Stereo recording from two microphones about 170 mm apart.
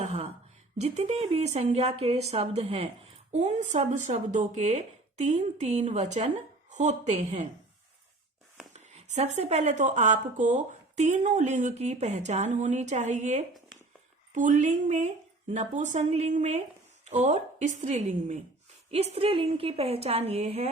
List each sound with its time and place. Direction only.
0.0 s a sound: 40° right (ahead or behind)
0.8 s speech: 40° right (ahead or behind)
8.7 s speech: 40° right (ahead or behind)